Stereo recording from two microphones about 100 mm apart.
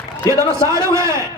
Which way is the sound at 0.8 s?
30° right (ahead or behind).